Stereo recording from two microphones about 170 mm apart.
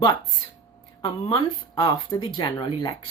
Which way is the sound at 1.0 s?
30° left (ahead or behind).